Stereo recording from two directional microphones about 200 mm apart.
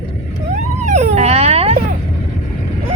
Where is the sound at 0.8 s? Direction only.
35° right (ahead or behind).